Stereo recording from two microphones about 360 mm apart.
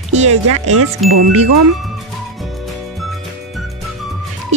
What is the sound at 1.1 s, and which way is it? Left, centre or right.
Chime, right.